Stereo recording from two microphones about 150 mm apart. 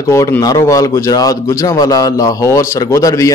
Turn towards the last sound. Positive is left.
turn(degrees=20)  # may be behind; listen again after turning